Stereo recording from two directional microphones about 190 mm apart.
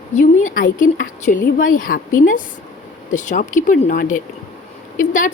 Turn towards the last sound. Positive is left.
turn(degrees=45)  # may be behind; listen again after turning